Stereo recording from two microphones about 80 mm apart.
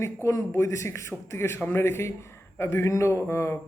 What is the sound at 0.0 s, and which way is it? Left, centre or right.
Speech, left.